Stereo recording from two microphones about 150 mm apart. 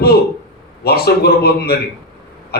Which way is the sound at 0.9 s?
90° left.